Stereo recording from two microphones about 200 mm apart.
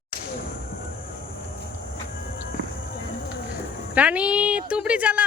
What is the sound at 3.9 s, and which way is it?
A woman's voice, 5° right (ahead or behind).